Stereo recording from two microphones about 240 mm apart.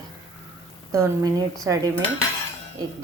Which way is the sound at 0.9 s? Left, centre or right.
Centre.